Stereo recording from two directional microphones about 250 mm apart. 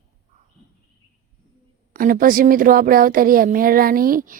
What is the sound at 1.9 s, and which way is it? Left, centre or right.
A woman's voice, right.